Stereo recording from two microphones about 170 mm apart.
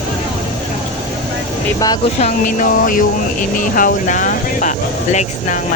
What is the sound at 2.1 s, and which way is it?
Speech, 45° left (ahead or behind).